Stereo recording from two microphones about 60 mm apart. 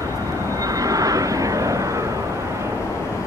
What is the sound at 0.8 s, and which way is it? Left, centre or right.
Vehicle, right.